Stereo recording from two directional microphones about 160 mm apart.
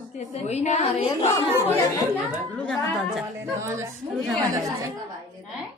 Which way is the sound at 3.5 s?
20° right (ahead or behind).